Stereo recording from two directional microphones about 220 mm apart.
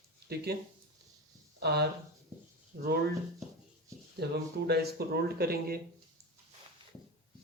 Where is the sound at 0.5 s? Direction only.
45° right (ahead or behind).